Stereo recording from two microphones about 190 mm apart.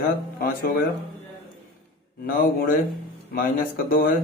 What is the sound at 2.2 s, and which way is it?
Speech, 50° left (ahead or behind).